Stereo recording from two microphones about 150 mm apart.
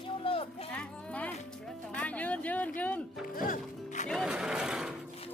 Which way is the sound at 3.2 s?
65° left (ahead or behind).